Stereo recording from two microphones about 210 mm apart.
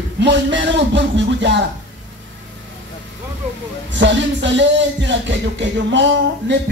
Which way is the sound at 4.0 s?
60° right (ahead or behind).